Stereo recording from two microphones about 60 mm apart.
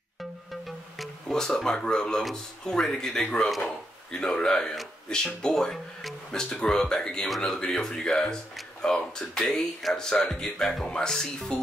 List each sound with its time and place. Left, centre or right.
0.5 s music: centre
1.3 s speech: centre